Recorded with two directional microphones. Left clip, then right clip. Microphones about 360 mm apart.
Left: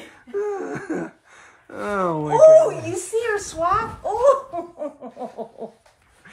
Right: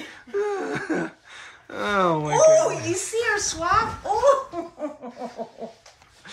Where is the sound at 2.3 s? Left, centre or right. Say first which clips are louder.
Left 6 dB; left.